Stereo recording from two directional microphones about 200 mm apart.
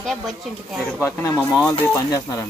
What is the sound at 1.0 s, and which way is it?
Speech, 10° left (ahead or behind).